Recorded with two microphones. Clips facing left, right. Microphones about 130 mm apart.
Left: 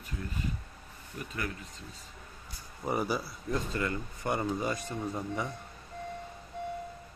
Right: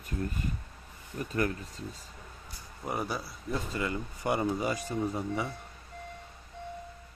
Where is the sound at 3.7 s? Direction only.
15° right (ahead or behind).